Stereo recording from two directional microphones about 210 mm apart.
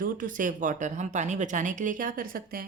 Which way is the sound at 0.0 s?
40° right (ahead or behind).